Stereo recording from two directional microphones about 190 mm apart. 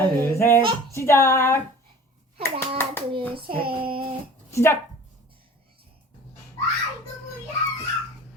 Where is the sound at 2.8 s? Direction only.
10° left (ahead or behind).